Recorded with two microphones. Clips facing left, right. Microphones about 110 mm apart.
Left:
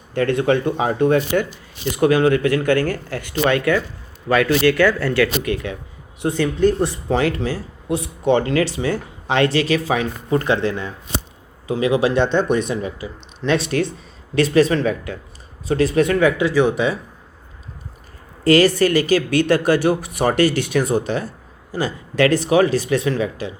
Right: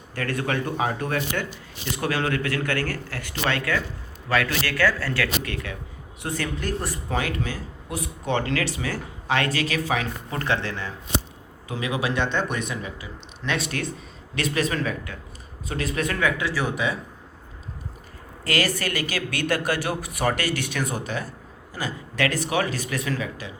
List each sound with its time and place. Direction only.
0.1 s speech: 20° left (ahead or behind)
11.7 s speech: 25° left (ahead or behind)
18.4 s speech: 30° left (ahead or behind)